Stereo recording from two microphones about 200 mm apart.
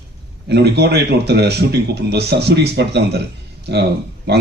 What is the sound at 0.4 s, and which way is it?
A man's voice, 55° right (ahead or behind).